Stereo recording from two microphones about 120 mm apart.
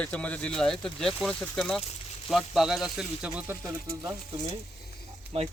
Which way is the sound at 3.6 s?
25° right (ahead or behind).